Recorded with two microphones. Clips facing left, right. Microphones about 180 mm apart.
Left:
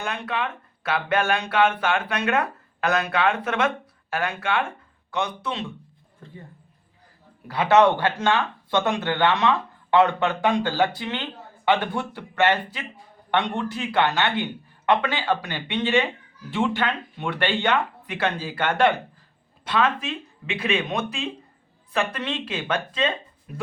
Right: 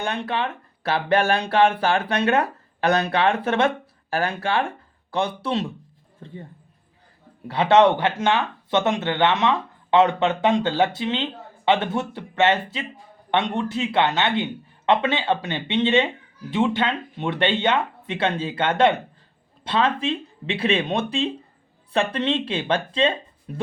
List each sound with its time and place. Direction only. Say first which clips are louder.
0.0 s speech: right 3 dB; 30° right (ahead or behind)
7.4 s speech: right 1 dB; 25° right (ahead or behind)